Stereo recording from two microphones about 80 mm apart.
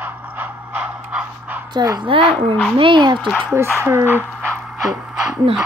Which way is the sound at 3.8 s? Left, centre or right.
Right.